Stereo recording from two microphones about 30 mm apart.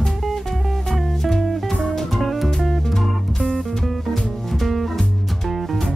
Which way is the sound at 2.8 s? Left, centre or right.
Centre.